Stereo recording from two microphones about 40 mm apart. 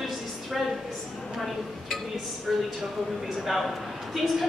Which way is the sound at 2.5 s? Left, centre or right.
Centre.